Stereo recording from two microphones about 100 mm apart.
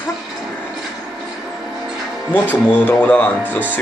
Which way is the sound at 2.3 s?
15° left (ahead or behind).